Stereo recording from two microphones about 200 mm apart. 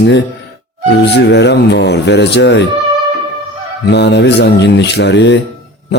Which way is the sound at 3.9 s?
55° left (ahead or behind).